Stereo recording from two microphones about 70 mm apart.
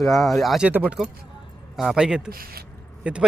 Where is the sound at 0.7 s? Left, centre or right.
Right.